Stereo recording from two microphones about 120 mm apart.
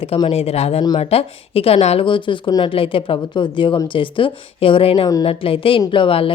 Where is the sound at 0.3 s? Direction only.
55° left (ahead or behind).